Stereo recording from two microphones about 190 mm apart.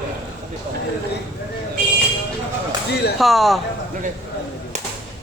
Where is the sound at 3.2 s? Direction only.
Centre (ahead or behind).